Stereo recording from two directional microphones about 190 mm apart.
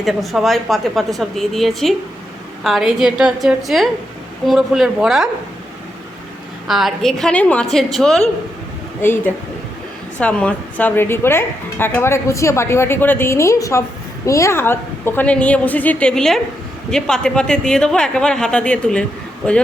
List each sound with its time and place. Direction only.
0.0 s speech: centre (ahead or behind)
6.7 s a woman's voice: centre (ahead or behind)